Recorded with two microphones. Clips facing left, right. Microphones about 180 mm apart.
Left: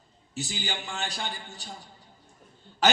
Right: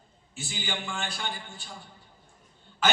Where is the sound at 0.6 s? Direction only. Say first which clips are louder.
Right 4 dB; 40° left (ahead or behind).